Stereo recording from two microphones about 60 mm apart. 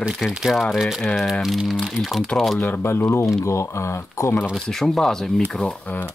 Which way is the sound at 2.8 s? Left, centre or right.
Left.